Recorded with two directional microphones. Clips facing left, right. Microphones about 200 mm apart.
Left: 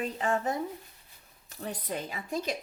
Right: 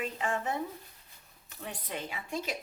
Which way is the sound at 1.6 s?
40° left (ahead or behind).